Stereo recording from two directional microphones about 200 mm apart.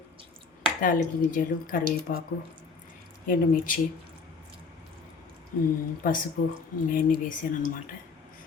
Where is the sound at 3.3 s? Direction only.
45° left (ahead or behind).